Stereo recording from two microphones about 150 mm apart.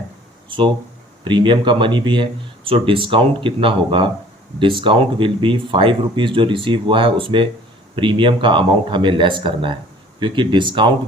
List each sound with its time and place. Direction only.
1.2 s speech: 35° right (ahead or behind)